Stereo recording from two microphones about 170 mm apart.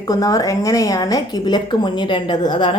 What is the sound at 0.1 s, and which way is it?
Speech, 20° left (ahead or behind).